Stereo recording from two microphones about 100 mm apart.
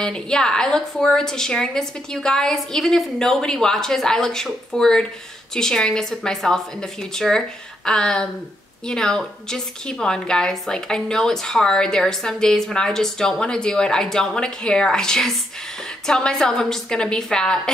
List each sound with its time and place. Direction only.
0.0 s a woman's voice: 5° left (ahead or behind)